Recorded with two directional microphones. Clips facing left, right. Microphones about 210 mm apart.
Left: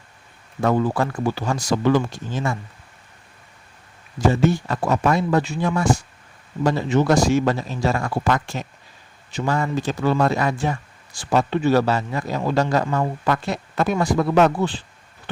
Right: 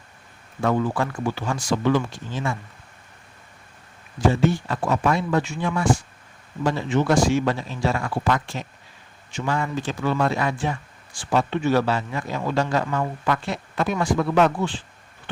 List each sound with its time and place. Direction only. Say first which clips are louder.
0.6 s speech: left 2 dB; 40° left (ahead or behind)
4.3 s speech: left 2 dB; 40° left (ahead or behind)